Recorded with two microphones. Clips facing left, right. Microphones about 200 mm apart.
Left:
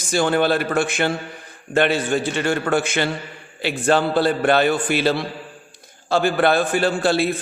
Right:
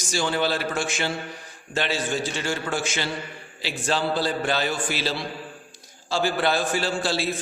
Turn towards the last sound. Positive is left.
turn(degrees=55)  # may be behind; listen again after turning